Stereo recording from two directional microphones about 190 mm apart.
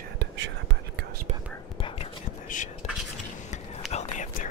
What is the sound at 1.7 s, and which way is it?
Whispering, 25° left (ahead or behind).